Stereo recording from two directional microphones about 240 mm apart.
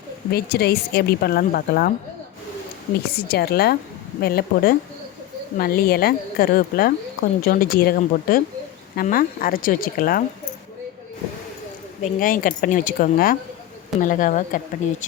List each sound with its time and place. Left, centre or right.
0.3 s a woman's voice: left
3.2 s a woman's voice: left
12.0 s a woman's voice: left